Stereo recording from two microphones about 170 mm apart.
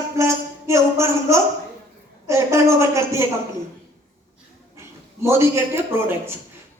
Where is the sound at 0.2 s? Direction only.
15° right (ahead or behind).